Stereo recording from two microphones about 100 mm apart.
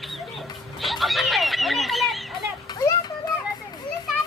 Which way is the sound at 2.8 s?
40° left (ahead or behind).